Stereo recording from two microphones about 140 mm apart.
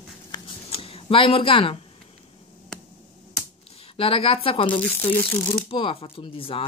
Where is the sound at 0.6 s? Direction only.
45° left (ahead or behind).